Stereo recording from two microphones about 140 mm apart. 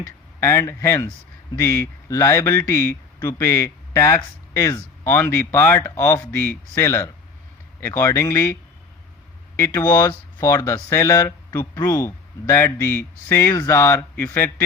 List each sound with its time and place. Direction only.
0.0 s speech: 20° left (ahead or behind)
9.6 s speech: 20° left (ahead or behind)